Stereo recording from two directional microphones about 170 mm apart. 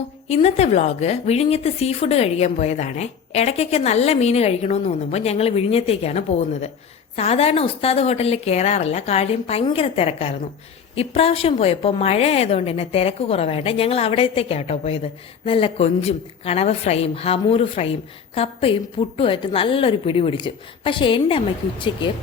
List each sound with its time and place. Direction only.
0.3 s a woman's voice: 40° left (ahead or behind)